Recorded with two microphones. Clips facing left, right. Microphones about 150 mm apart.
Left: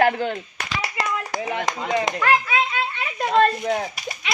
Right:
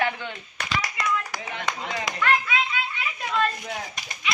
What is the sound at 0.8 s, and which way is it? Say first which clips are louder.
Clapping: left 4 dB; 30° left (ahead or behind).